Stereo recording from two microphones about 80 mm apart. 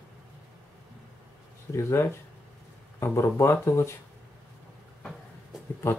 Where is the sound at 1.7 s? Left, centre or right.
Left.